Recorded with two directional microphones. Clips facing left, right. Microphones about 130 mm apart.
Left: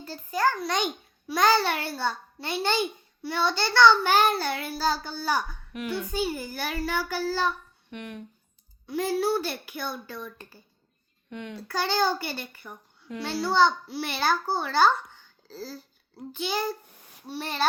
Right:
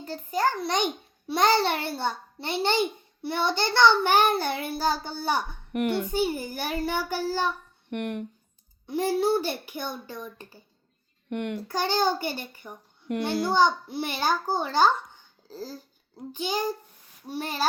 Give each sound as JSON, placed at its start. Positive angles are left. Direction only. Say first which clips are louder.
{"t": 0.0, "sound": "a child's voice", "louder": "even", "side_deg": -20}
{"t": 5.7, "sound": "speech", "louder": "right 6 dB", "side_deg": -60}
{"t": 6.1, "sound": "a child's voice", "louder": "right 3 dB", "side_deg": -20}
{"t": 7.9, "sound": "speech", "louder": "right 8 dB", "side_deg": -60}
{"t": 8.9, "sound": "a child's voice", "louder": "right 2 dB", "side_deg": -20}
{"t": 11.3, "sound": "speech", "louder": "right 7 dB", "side_deg": -65}
{"t": 11.7, "sound": "a child's voice", "louder": "even", "side_deg": -20}